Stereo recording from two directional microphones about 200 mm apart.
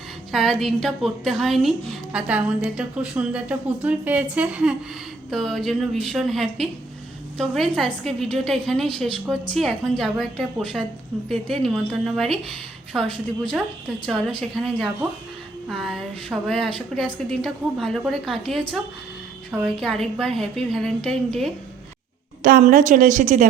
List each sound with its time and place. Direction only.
0.3 s a woman's voice: centre (ahead or behind)
22.4 s a woman's voice: 40° right (ahead or behind)